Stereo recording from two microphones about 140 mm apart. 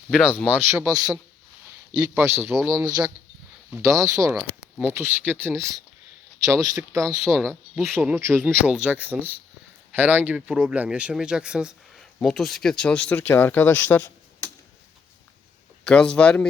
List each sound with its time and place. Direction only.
0.1 s speech: 5° right (ahead or behind)
0.9 s speech: 30° right (ahead or behind)
2.1 s speech: 15° right (ahead or behind)
3.7 s speech: 25° right (ahead or behind)
4.4 s speech: 10° right (ahead or behind)
7.3 s speech: 5° left (ahead or behind)
7.9 s speech: 20° right (ahead or behind); by 14.5 s 15° left (ahead or behind)
15.8 s speech: 5° left (ahead or behind)